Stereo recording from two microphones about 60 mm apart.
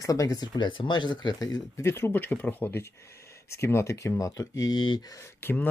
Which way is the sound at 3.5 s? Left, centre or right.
Left.